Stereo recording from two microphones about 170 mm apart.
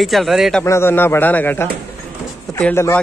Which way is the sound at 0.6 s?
15° left (ahead or behind).